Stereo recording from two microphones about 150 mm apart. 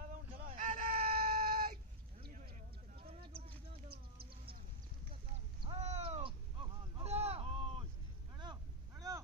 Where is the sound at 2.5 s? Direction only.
60° right (ahead or behind).